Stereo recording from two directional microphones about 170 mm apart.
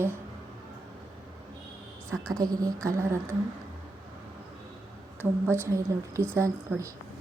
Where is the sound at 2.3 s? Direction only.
20° right (ahead or behind).